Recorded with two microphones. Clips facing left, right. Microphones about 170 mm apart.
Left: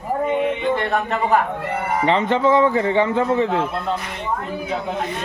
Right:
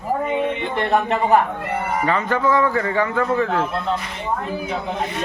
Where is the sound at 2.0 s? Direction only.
25° left (ahead or behind).